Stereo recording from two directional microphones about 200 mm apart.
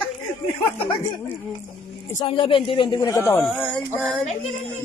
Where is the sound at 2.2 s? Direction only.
25° left (ahead or behind).